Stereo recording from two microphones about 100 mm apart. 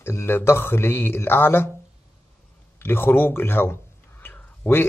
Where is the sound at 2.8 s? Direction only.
20° left (ahead or behind).